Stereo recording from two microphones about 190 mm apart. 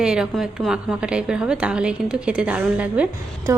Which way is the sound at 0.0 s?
5° right (ahead or behind).